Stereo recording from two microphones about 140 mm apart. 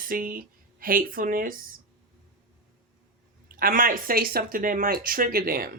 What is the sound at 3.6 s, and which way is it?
Speech, 90° right.